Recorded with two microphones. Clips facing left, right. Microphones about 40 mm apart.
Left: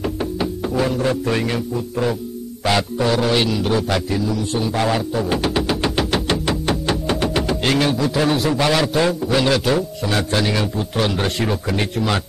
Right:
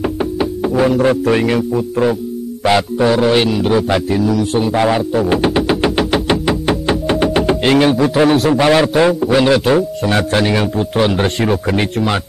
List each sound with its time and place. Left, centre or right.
0.0 s music: centre
1.4 s a man's voice: right
5.9 s music: centre
7.3 s a man's voice: right